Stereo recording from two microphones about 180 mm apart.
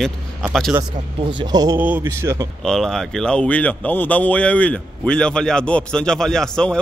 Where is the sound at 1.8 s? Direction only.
10° right (ahead or behind).